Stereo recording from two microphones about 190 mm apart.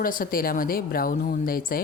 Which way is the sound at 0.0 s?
50° left (ahead or behind).